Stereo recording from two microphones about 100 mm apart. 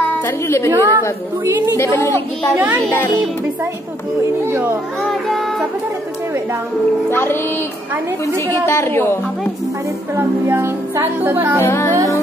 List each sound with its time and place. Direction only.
0.0 s a woman's voice: 25° left (ahead or behind)
0.7 s speech: 30° right (ahead or behind)
1.8 s a woman's voice: 25° left (ahead or behind)
2.5 s a child's voice: 15° right (ahead or behind)
4.5 s speech: 25° right (ahead or behind)
7.1 s a woman's voice: 25° left (ahead or behind)
8.6 s a woman's voice: 25° left (ahead or behind)
10.1 s speech: 25° right (ahead or behind)
11.6 s a woman's voice: 30° left (ahead or behind)